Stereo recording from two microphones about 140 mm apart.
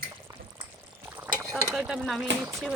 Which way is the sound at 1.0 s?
15° right (ahead or behind).